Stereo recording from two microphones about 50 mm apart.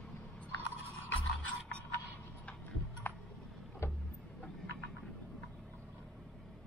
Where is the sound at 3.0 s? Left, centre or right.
Left.